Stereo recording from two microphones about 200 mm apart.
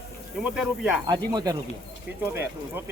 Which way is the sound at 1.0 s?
20° right (ahead or behind).